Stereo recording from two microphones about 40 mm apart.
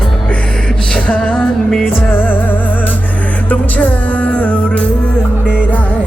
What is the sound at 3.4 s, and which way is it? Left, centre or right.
Music, left.